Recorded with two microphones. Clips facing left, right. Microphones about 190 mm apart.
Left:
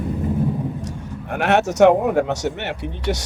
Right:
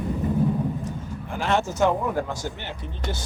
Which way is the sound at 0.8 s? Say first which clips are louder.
Left 2 dB; 75° left (ahead or behind).